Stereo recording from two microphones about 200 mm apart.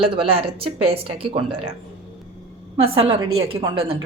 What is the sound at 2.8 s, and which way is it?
Speech, 30° right (ahead or behind).